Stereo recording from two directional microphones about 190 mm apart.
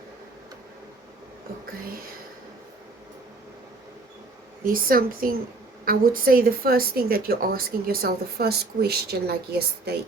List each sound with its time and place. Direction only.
4.6 s a woman's voice: 50° right (ahead or behind)